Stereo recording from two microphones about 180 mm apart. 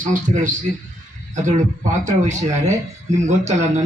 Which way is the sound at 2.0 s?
40° right (ahead or behind).